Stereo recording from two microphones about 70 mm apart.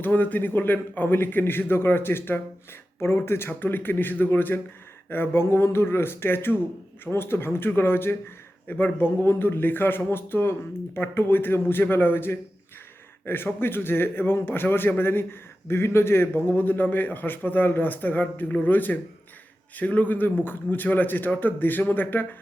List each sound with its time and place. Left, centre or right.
0.0 s a man's voice: left